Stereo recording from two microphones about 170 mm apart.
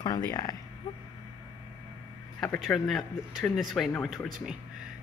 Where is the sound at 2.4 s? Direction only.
5° left (ahead or behind).